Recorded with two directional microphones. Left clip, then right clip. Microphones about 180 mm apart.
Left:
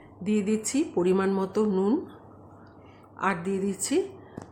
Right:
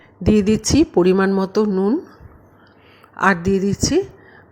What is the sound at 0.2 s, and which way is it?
A woman's voice, 45° right (ahead or behind).